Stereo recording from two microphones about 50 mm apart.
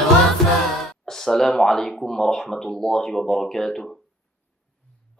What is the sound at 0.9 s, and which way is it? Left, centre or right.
Speech, centre.